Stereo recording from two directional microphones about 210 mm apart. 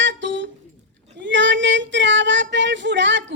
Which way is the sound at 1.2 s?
60° right (ahead or behind).